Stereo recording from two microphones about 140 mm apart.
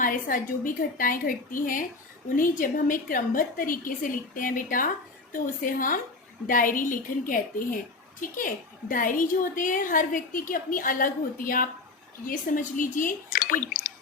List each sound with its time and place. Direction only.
0.0 s a woman's voice: 75° left (ahead or behind)
12.2 s a woman's voice: 75° left (ahead or behind)